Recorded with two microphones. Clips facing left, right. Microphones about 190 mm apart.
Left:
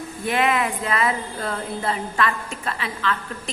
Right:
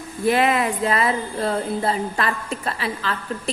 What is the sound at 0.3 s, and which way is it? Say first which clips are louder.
A woman's voice: right 3 dB; 35° right (ahead or behind).